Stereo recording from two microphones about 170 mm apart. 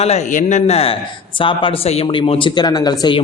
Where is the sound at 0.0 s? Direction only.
40° left (ahead or behind).